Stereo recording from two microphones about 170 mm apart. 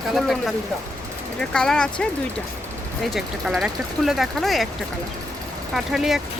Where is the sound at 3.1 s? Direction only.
Centre (ahead or behind).